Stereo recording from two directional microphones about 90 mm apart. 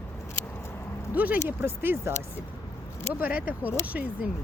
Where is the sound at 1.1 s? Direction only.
15° right (ahead or behind).